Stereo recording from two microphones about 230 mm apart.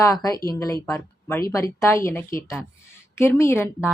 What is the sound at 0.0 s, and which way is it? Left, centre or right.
A woman's voice, centre.